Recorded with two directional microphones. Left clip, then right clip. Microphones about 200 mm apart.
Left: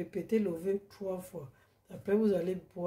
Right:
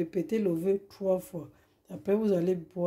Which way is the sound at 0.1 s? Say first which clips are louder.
Right 3 dB; 35° right (ahead or behind).